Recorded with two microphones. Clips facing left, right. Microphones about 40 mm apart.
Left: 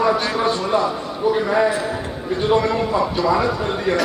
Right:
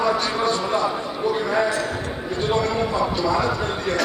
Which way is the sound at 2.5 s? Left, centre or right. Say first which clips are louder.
Left 3 dB; centre.